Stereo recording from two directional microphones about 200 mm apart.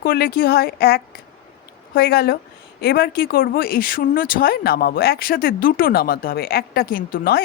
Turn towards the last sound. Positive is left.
turn(degrees=45)  # may be behind; listen again after turning